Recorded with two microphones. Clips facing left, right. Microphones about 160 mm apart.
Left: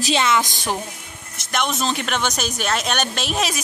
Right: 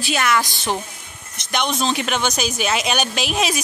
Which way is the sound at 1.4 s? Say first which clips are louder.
Right 1 dB; centre (ahead or behind).